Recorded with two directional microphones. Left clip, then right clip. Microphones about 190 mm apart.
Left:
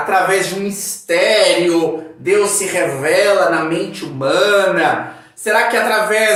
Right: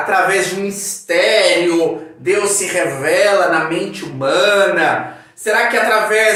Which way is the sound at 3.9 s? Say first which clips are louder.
Even; 10° left (ahead or behind).